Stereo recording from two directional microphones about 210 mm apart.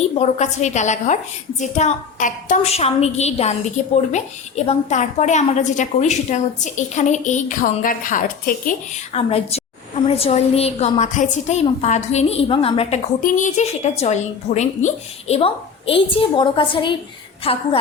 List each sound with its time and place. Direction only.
0.2 s a woman's voice: 35° left (ahead or behind)
9.1 s a woman's voice: 30° left (ahead or behind)